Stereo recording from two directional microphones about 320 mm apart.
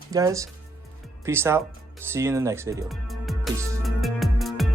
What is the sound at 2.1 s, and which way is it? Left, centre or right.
Music, centre.